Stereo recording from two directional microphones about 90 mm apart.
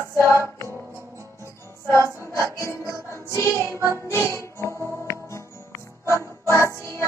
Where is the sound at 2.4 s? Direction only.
35° left (ahead or behind).